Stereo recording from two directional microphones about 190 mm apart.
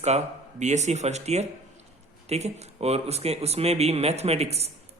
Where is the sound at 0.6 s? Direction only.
35° right (ahead or behind).